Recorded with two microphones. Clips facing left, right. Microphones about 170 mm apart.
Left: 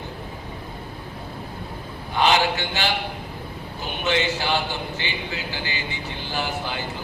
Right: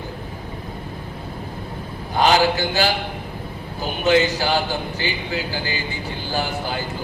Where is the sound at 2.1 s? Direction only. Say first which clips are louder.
Right 3 dB; 40° right (ahead or behind).